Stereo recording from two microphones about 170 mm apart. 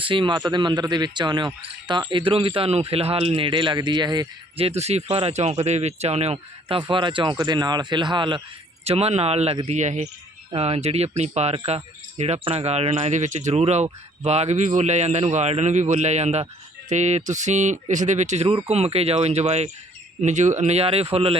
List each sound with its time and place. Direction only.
0.0 s speech: 30° right (ahead or behind)